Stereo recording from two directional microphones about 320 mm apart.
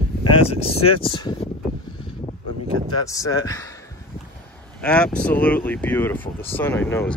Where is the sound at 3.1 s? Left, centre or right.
Centre.